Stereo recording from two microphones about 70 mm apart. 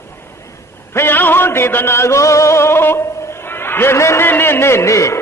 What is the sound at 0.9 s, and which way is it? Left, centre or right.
Music, left.